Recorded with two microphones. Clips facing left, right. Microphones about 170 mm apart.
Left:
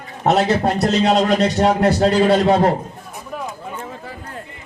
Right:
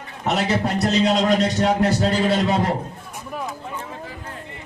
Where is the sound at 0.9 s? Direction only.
60° left (ahead or behind).